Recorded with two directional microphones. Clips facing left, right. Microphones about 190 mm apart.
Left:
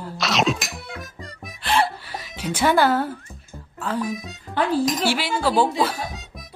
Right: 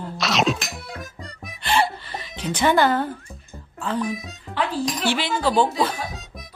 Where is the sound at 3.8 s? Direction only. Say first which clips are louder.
Even; 5° left (ahead or behind).